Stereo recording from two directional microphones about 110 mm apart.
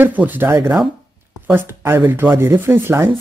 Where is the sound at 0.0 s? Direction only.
15° right (ahead or behind).